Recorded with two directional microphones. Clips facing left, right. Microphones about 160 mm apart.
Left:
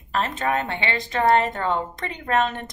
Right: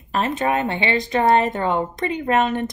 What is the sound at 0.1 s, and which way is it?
Speech, 15° right (ahead or behind).